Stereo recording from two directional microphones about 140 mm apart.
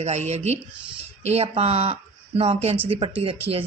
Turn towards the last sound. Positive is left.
turn(degrees=-40)  # may be behind; listen again after turning